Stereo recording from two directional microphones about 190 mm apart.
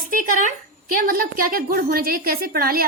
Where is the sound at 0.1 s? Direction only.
45° right (ahead or behind).